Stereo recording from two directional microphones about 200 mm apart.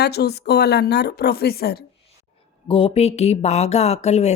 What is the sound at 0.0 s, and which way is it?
Speech, 55° left (ahead or behind).